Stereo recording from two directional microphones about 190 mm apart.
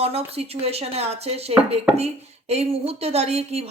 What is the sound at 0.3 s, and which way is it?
Speech, 30° right (ahead or behind).